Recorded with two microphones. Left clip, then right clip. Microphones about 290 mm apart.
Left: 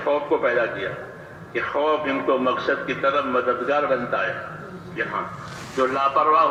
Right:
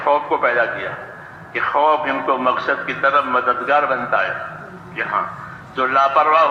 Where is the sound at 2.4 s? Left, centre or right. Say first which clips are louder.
Right 4 dB; right.